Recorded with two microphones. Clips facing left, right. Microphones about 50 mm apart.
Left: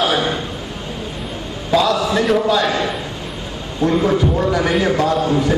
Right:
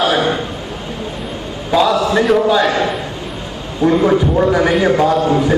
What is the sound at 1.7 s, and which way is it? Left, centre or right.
A man's voice, centre.